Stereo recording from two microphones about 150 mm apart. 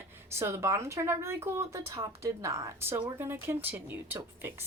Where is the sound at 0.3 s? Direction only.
20° right (ahead or behind).